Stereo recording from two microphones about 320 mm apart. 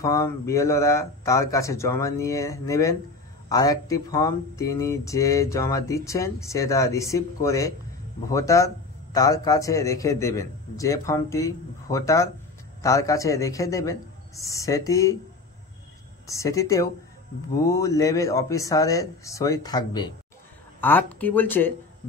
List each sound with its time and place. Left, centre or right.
0.0 s speech: centre
16.3 s speech: centre